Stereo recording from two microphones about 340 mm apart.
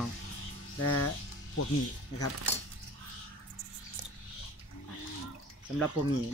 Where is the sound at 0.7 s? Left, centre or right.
Left.